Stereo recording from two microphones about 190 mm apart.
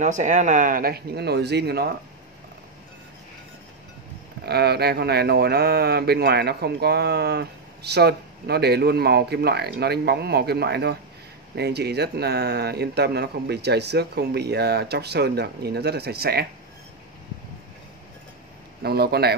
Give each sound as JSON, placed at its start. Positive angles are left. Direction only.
{"t": 0.0, "sound": "speech", "side_deg": -40}
{"t": 4.5, "sound": "speech", "side_deg": -60}
{"t": 18.8, "sound": "speech", "side_deg": -55}